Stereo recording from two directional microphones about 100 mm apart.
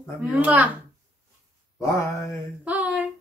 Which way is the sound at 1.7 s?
30° left (ahead or behind).